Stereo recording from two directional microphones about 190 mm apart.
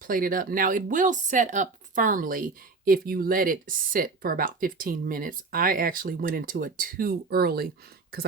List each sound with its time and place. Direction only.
0.0 s speech: 45° right (ahead or behind)